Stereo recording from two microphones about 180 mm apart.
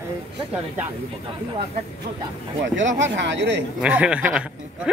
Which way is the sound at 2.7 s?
85° right.